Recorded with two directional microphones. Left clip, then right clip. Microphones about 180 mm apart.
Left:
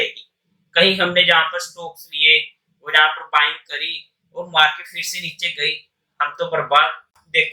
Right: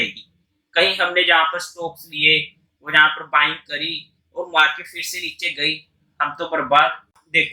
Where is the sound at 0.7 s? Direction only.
10° left (ahead or behind).